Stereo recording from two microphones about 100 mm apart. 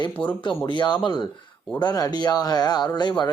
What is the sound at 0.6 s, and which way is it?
Speech, 50° left (ahead or behind).